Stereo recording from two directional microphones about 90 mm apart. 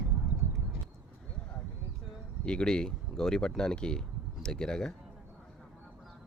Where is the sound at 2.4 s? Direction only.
10° left (ahead or behind).